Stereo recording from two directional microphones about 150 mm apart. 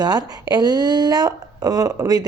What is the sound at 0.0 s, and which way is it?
Speech, 25° right (ahead or behind).